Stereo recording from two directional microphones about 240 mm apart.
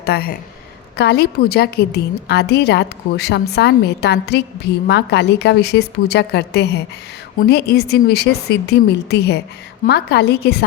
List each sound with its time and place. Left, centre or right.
0.0 s a woman's voice: left